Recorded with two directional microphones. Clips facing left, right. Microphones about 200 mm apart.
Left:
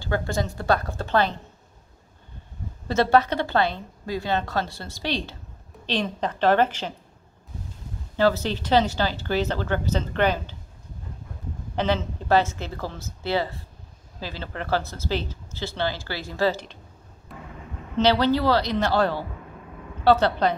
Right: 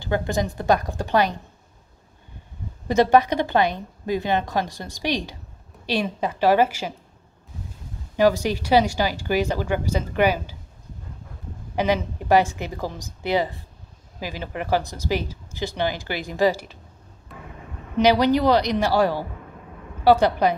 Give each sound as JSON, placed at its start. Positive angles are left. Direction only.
{"t": 0.0, "sound": "speech", "side_deg": -20}
{"t": 2.9, "sound": "speech", "side_deg": -15}
{"t": 8.2, "sound": "speech", "side_deg": -15}
{"t": 11.7, "sound": "speech", "side_deg": -10}
{"t": 17.9, "sound": "speech", "side_deg": -15}